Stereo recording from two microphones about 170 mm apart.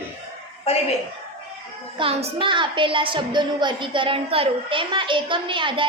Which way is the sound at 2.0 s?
30° right (ahead or behind).